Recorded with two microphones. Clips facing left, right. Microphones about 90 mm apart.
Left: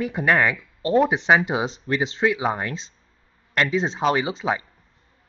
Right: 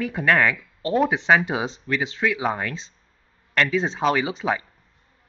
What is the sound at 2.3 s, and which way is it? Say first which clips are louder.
Speech: left 1 dB; 10° left (ahead or behind).